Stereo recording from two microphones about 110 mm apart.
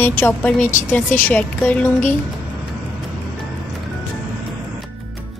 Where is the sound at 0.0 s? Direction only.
20° left (ahead or behind).